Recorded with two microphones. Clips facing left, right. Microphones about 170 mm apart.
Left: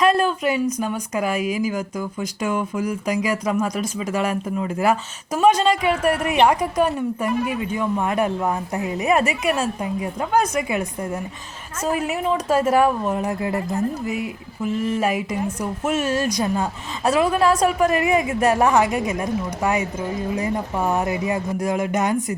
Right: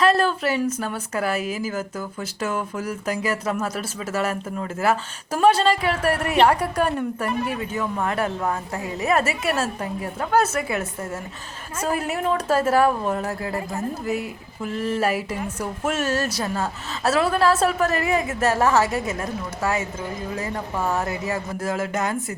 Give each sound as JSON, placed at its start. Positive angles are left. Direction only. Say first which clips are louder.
{"t": 0.1, "sound": "a woman's voice", "louder": "left 1 dB", "side_deg": 10}
{"t": 13.4, "sound": "speech", "louder": "left 4 dB", "side_deg": 20}
{"t": 14.0, "sound": "speech", "louder": "even", "side_deg": -45}
{"t": 14.6, "sound": "a woman's voice", "louder": "left 2 dB", "side_deg": 10}